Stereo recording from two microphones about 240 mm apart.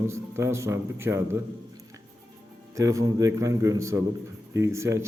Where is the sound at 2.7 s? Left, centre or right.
Centre.